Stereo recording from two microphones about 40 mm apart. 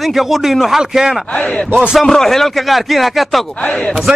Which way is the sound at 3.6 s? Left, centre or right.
Left.